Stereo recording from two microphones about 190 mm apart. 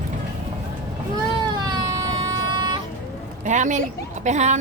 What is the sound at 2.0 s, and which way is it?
Vehicle, 20° right (ahead or behind).